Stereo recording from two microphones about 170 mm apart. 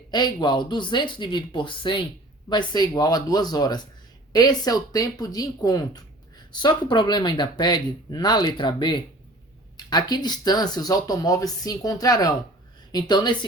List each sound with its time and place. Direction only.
0.1 s speech: 25° left (ahead or behind)